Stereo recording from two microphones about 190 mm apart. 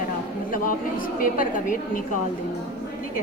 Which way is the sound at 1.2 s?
45° left (ahead or behind).